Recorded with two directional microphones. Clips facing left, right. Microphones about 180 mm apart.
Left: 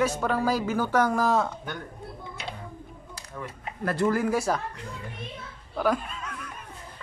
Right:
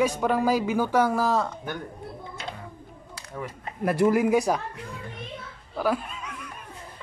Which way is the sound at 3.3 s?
20° right (ahead or behind).